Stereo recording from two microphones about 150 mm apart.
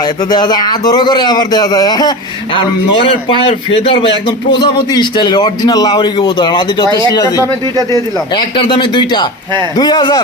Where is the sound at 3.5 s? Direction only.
35° left (ahead or behind).